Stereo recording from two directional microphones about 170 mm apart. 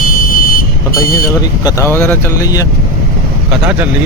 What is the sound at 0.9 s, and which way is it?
Speech, 20° left (ahead or behind).